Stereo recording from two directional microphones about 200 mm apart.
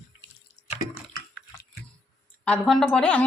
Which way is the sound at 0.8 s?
45° left (ahead or behind).